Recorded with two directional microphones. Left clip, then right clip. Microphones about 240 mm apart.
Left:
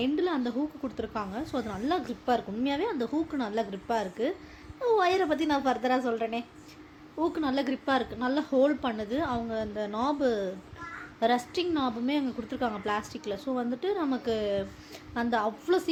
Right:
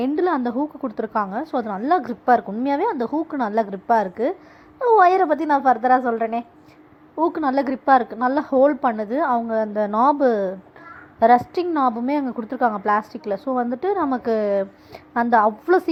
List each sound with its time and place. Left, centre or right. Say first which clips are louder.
0.0 s a woman's voice: right 8 dB; right